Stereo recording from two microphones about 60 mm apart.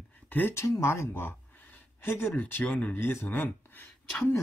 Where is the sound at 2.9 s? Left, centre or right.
Left.